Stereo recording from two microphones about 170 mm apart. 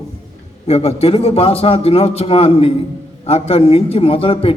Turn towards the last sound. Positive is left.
turn(degrees=35)  # may be behind; listen again after turning